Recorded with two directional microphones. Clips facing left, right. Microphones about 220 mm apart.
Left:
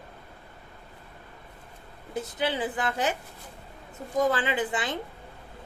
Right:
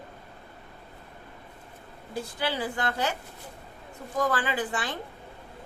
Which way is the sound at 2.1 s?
20° left (ahead or behind).